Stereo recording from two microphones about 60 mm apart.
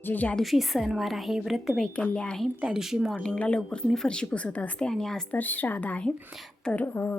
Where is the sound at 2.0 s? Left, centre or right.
Centre.